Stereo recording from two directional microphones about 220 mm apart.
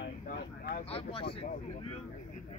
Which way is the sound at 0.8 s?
25° left (ahead or behind).